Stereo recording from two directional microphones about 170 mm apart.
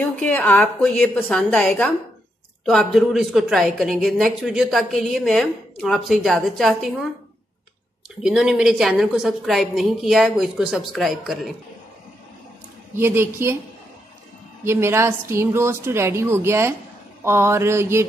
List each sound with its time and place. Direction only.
0.0 s a woman's voice: 10° left (ahead or behind)
8.2 s speech: 5° right (ahead or behind)
12.9 s a woman's voice: 15° right (ahead or behind)
14.6 s a woman's voice: 15° right (ahead or behind)